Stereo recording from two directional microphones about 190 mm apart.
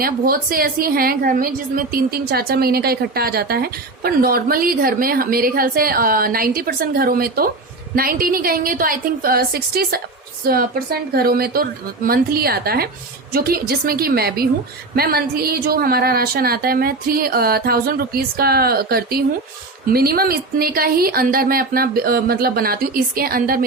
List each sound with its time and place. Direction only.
0.0 s a woman's voice: 50° right (ahead or behind)